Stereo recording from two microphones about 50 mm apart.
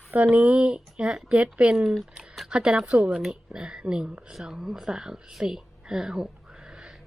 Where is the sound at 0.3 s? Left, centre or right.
Right.